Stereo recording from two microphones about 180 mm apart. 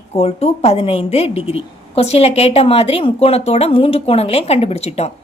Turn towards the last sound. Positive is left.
turn(degrees=35)  # may be behind; listen again after turning